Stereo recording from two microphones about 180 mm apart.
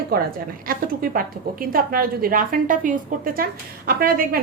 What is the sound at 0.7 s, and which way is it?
A woman's voice, 50° right (ahead or behind).